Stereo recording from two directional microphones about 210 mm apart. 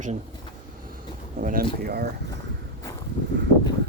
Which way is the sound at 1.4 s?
45° right (ahead or behind).